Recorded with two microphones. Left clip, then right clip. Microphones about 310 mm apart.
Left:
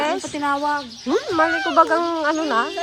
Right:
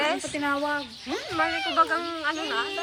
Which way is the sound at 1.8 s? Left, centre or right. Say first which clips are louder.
Left 8 dB; centre.